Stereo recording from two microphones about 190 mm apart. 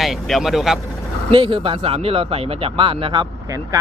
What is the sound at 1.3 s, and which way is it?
Speech, 25° right (ahead or behind).